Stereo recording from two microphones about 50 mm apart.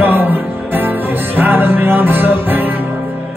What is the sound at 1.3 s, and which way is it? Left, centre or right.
Music, right.